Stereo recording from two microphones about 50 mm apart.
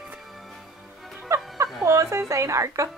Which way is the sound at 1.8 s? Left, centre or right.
Right.